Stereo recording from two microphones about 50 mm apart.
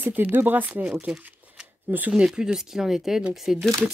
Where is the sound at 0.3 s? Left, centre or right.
Right.